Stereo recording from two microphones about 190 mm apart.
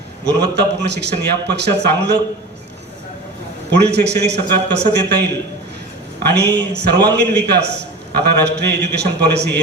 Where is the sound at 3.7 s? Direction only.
65° right (ahead or behind).